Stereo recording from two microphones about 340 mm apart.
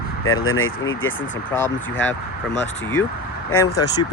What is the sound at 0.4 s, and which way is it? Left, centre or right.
Speech, left.